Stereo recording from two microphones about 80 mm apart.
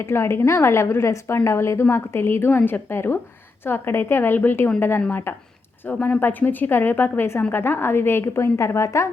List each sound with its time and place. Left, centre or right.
0.0 s a woman's voice: left